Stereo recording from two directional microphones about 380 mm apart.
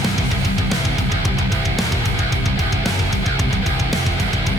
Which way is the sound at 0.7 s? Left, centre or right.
Centre.